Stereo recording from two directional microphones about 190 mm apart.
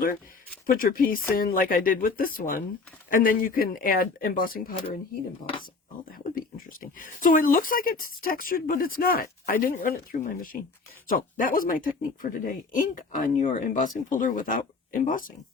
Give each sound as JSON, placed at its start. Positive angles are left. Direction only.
{"t": 0.7, "sound": "speech", "side_deg": 45}
{"t": 6.1, "sound": "speech", "side_deg": 50}